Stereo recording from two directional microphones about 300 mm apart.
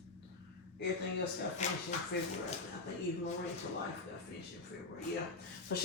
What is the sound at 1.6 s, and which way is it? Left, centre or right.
Speech, left.